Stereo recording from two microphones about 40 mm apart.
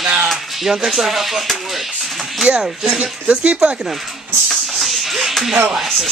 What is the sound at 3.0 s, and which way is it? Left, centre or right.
Speech, right.